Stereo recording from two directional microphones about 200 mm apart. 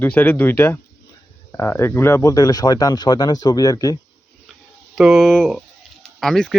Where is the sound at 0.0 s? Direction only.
10° left (ahead or behind).